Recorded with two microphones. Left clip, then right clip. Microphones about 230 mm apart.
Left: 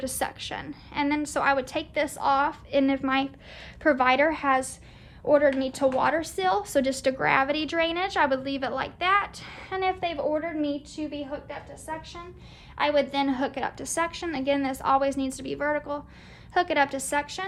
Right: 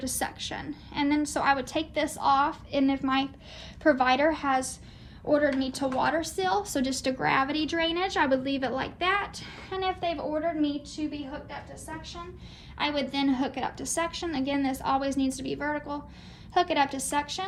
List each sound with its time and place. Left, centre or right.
0.0 s a woman's voice: left
12.7 s a woman's voice: left